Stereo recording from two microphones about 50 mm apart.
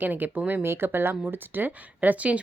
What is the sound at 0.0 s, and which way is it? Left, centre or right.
Speech, right.